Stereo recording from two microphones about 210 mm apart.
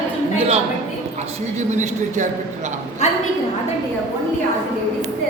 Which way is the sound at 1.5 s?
35° right (ahead or behind).